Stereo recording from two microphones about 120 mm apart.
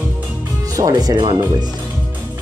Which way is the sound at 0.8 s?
30° right (ahead or behind).